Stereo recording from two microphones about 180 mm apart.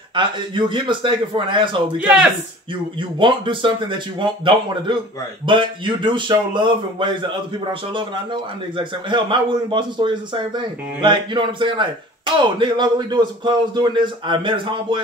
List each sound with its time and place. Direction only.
0.1 s a man's voice: 25° right (ahead or behind)
2.0 s speech: 5° right (ahead or behind)
3.0 s a man's voice: 25° right (ahead or behind)